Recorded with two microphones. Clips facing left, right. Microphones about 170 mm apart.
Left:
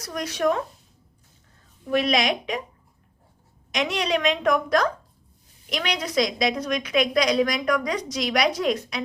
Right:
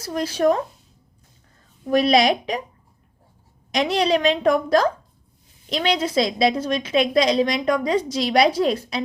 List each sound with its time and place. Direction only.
0.0 s a woman's voice: 30° right (ahead or behind)
1.9 s a woman's voice: 35° right (ahead or behind)
3.7 s a woman's voice: 35° right (ahead or behind)